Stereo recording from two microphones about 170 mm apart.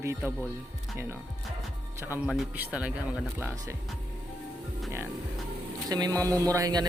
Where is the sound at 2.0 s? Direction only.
10° right (ahead or behind).